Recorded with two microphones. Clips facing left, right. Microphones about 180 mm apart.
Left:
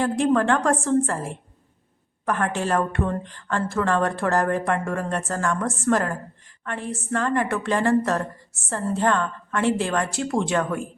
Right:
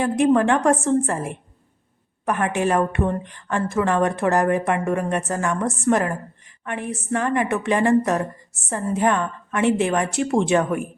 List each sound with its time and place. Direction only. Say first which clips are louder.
0.0 s a woman's voice: right 3 dB; 15° right (ahead or behind)